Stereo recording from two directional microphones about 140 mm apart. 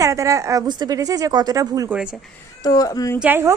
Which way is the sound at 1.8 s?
5° right (ahead or behind).